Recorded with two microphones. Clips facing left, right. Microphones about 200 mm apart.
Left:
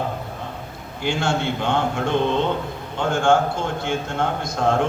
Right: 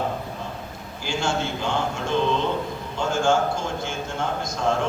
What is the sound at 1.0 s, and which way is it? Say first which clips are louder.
Speech: left 3 dB; 60° left (ahead or behind).